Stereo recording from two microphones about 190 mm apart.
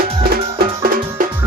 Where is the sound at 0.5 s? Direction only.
45° right (ahead or behind).